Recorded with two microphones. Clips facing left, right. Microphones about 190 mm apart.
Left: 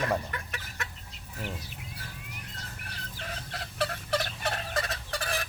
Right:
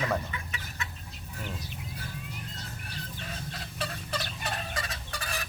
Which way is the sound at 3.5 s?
60° left (ahead or behind).